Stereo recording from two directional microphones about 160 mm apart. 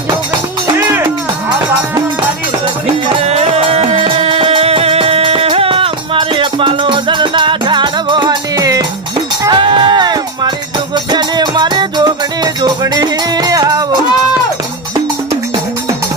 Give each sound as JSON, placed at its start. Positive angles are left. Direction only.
{"t": 3.2, "sound": "music", "side_deg": -40}